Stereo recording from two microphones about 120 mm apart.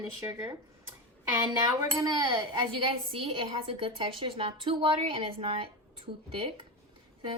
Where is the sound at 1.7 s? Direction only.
40° right (ahead or behind).